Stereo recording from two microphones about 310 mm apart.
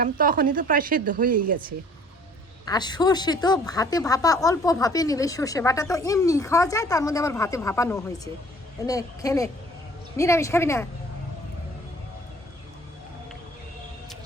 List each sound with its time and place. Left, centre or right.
0.0 s speech: right
2.6 s speech: centre